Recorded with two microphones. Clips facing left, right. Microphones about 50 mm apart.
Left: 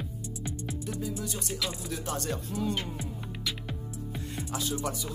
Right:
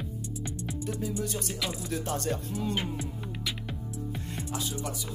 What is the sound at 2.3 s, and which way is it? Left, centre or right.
Speech, centre.